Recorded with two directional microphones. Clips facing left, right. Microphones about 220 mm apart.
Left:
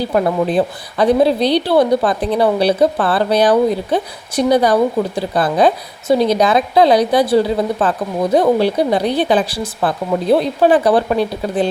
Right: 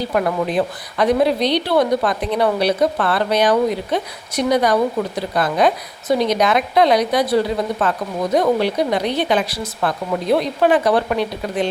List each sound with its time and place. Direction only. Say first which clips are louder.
0.1 s speech: left 4 dB; 30° left (ahead or behind)